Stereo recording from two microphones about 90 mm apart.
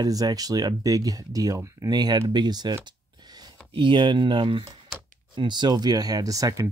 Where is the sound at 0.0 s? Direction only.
45° right (ahead or behind).